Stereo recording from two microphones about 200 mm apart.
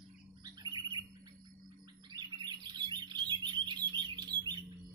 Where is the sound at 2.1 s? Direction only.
20° right (ahead or behind).